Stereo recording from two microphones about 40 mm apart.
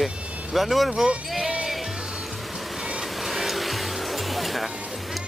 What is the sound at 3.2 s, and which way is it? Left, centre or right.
Music, centre.